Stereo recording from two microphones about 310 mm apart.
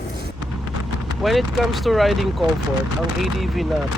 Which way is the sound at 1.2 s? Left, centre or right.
Centre.